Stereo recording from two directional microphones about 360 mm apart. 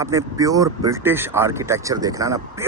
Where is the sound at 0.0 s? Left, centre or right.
Centre.